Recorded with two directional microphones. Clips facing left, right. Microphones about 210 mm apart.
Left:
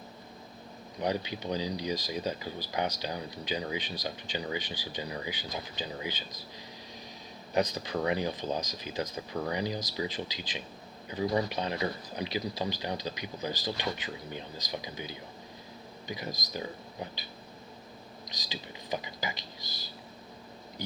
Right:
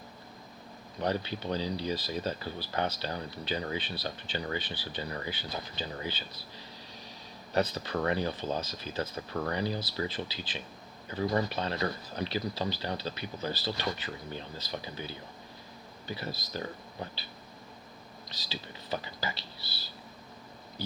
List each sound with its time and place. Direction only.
1.0 s speech: 15° left (ahead or behind)
7.5 s speech: 15° left (ahead or behind)
18.3 s speech: 15° left (ahead or behind)